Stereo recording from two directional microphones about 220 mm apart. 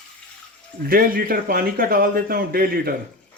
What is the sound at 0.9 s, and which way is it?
A man's voice, 40° right (ahead or behind).